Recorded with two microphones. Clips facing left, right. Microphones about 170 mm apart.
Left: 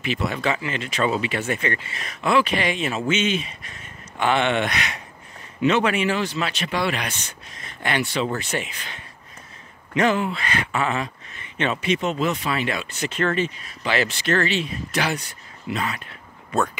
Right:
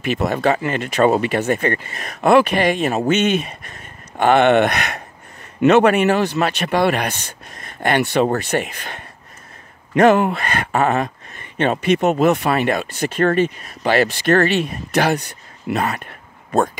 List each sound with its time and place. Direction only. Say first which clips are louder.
0.0 s speech: right 6 dB; 45° right (ahead or behind)